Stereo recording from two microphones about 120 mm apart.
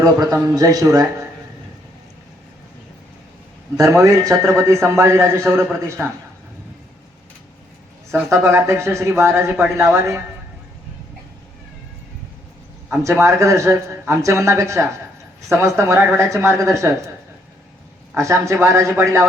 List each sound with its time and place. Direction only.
0.0 s speech: 25° right (ahead or behind)
3.8 s a man's voice: 25° right (ahead or behind)
8.3 s a man's voice: 20° right (ahead or behind)
13.0 s a man's voice: 25° right (ahead or behind)
18.2 s a man's voice: 25° right (ahead or behind)